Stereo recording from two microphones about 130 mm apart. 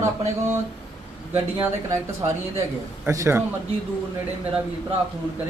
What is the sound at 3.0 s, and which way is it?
Speech, 20° right (ahead or behind).